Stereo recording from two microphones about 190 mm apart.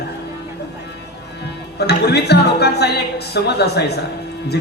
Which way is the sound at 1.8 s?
60° left (ahead or behind).